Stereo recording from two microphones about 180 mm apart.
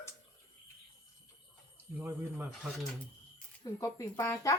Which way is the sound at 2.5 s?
Centre (ahead or behind).